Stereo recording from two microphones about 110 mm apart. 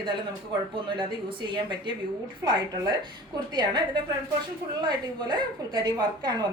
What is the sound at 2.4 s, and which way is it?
Speech, 30° right (ahead or behind).